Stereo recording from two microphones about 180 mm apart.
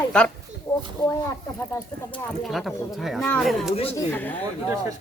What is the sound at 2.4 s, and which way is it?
Speech, centre (ahead or behind).